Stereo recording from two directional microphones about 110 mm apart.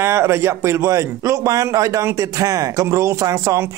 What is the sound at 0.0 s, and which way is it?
A man's voice, 25° right (ahead or behind).